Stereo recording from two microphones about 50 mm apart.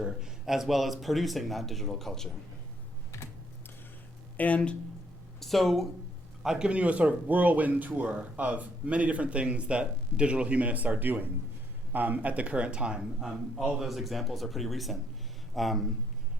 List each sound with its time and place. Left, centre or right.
0.0 s a man's voice: centre
4.4 s speech: left
5.4 s a man's voice: centre
6.4 s a man's voice: centre
6.7 s speech: right
13.7 s a man's voice: centre